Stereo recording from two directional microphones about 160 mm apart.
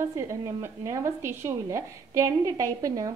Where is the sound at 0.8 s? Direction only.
15° right (ahead or behind).